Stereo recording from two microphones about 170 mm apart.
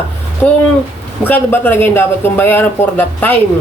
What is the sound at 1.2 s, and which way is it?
Speech, 10° left (ahead or behind).